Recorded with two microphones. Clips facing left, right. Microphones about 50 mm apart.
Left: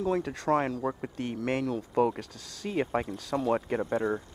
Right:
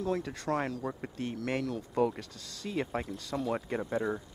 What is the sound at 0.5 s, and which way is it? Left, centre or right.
Speech, left.